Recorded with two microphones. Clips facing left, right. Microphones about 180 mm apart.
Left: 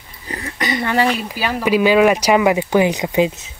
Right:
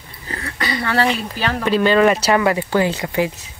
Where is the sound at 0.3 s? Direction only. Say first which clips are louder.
Left 2 dB; 20° left (ahead or behind).